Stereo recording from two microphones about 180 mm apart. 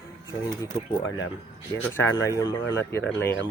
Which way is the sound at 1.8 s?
10° left (ahead or behind).